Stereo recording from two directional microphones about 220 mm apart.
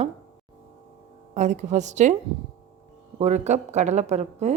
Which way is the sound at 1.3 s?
30° right (ahead or behind).